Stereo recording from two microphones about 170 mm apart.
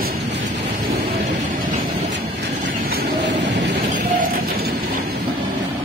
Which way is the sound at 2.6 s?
55° right (ahead or behind).